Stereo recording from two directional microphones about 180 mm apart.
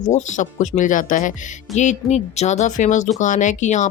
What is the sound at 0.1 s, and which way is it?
Speech, 40° left (ahead or behind).